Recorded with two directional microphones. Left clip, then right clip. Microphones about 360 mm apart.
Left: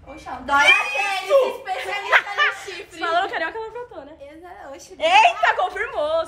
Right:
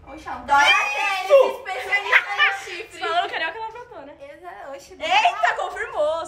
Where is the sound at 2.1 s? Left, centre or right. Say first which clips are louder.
Left 1 dB; centre.